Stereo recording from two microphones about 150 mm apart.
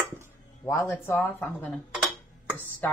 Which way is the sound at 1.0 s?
15° left (ahead or behind).